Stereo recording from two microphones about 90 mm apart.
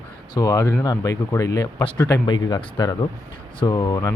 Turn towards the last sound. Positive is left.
turn(degrees=45)  # may be behind; listen again after turning